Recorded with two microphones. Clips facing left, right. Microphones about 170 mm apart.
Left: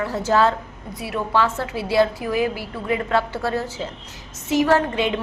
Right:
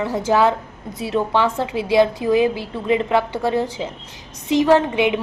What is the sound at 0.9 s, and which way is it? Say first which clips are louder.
A woman's voice: right 3 dB; 25° right (ahead or behind).